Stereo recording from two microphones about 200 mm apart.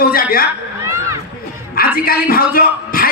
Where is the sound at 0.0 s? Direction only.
45° left (ahead or behind).